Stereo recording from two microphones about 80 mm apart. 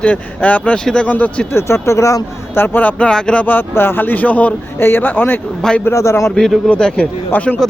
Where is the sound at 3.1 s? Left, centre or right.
Centre.